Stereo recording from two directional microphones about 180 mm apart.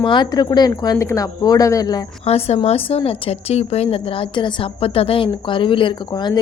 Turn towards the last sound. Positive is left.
turn(degrees=25)  # may be behind; listen again after turning